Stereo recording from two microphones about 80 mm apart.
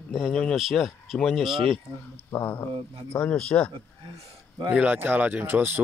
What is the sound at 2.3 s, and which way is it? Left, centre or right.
Speech, left.